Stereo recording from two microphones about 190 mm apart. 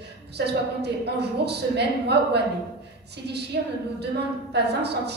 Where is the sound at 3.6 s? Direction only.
65° right (ahead or behind).